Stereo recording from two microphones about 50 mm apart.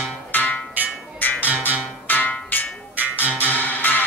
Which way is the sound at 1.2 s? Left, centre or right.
Left.